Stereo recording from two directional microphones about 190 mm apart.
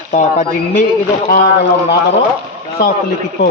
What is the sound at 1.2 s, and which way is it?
Speech, 50° left (ahead or behind).